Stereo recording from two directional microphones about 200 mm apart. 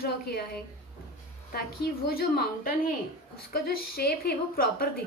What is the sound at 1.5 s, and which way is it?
A woman's voice, 50° left (ahead or behind).